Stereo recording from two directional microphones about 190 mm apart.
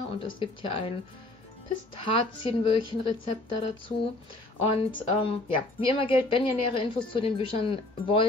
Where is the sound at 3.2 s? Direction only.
30° left (ahead or behind).